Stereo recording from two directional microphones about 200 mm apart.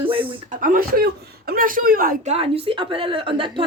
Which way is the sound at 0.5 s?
40° right (ahead or behind).